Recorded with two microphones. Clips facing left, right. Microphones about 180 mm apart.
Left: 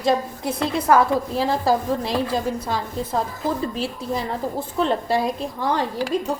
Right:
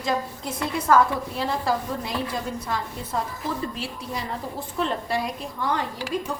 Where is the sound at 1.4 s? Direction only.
35° left (ahead or behind).